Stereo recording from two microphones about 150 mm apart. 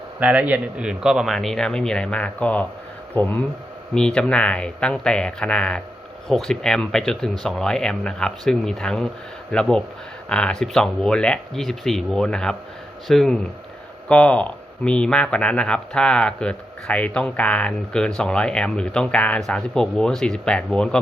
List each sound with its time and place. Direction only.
0.2 s speech: 10° right (ahead or behind); by 21.0 s 5° left (ahead or behind)